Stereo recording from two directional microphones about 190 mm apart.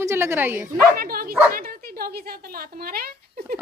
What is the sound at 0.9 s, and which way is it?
A woman's voice, 50° right (ahead or behind).